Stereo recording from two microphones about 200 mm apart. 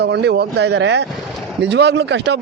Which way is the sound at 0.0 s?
55° right (ahead or behind).